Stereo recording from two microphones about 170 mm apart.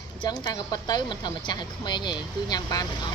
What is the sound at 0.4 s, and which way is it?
Speech, 25° left (ahead or behind).